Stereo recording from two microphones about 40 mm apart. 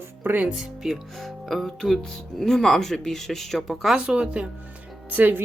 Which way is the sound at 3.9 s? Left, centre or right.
Centre.